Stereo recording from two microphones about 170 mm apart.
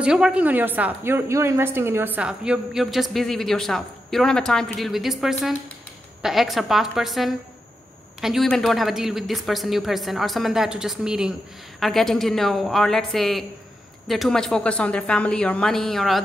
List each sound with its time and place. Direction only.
0.0 s speech: 5° right (ahead or behind)